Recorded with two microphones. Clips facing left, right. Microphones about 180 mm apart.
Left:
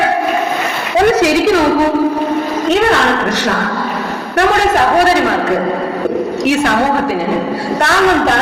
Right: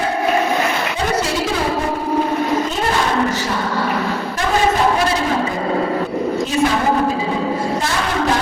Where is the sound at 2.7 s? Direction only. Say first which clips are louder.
Left 7 dB; 70° left (ahead or behind).